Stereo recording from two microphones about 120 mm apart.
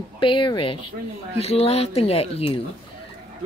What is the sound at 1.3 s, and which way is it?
Speech, 55° left (ahead or behind).